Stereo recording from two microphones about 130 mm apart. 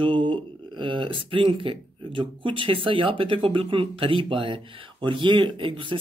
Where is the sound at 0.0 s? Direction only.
40° right (ahead or behind).